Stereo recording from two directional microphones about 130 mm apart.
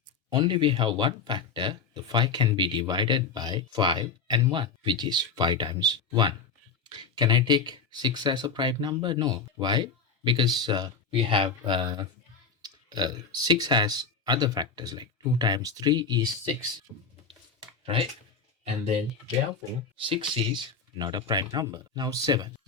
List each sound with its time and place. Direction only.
0.3 s speech: 35° right (ahead or behind)
7.0 s speech: 35° right (ahead or behind)
16.9 s speech: 5° left (ahead or behind)
20.0 s speech: 45° right (ahead or behind)